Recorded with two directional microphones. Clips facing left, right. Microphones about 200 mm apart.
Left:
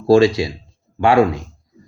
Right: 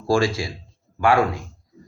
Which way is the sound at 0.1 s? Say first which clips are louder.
Left 8 dB; 20° left (ahead or behind).